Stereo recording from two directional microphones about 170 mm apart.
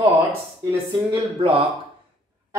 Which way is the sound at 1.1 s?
30° right (ahead or behind).